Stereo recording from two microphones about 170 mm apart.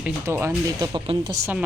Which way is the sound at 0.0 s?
15° right (ahead or behind).